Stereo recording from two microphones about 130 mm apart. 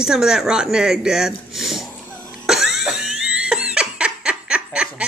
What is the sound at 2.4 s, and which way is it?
Cough, 5° right (ahead or behind).